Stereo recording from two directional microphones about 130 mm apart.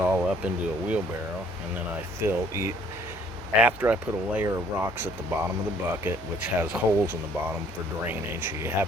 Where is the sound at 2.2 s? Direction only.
20° right (ahead or behind).